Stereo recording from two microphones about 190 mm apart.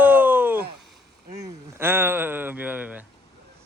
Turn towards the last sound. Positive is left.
turn(degrees=-10)  # may be behind; listen again after turning